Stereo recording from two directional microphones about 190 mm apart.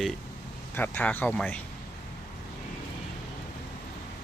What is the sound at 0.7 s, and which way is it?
Speech, 10° left (ahead or behind).